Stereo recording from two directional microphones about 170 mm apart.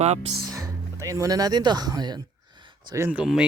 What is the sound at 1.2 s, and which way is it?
Speech, 20° right (ahead or behind).